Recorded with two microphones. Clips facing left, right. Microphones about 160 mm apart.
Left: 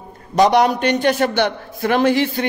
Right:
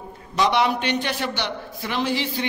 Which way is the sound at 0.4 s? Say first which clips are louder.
Left 7 dB; 45° left (ahead or behind).